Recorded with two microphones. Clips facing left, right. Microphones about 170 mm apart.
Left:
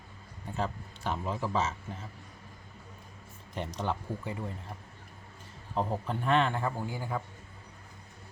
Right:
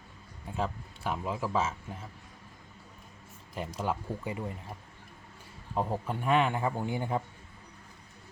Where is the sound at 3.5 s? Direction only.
5° right (ahead or behind).